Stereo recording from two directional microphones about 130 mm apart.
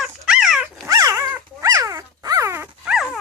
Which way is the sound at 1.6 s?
25° right (ahead or behind).